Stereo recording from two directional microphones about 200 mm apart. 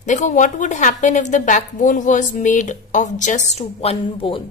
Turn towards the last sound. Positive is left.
turn(degrees=25)  # may be behind; listen again after turning